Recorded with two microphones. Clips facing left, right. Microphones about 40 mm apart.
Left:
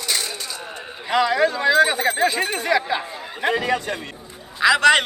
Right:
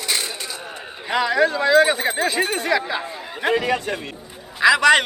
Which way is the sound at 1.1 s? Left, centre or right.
Centre.